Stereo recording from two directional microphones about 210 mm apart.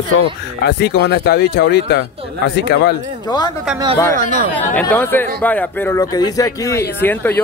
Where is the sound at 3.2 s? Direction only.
20° left (ahead or behind).